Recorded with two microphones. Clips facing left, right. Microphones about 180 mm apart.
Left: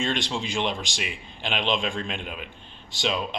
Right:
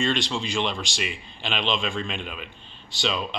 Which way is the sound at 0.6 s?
15° left (ahead or behind).